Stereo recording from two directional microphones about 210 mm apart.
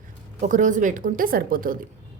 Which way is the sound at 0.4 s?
35° right (ahead or behind).